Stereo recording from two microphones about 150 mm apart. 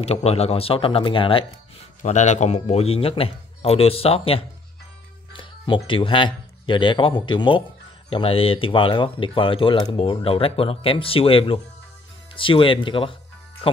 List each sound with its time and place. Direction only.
0.0 s speech: 45° left (ahead or behind)
2.0 s speech: 50° left (ahead or behind); by 13.1 s 35° left (ahead or behind)